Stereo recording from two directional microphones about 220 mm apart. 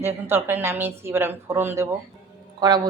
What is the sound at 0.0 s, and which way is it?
Speech, 10° right (ahead or behind).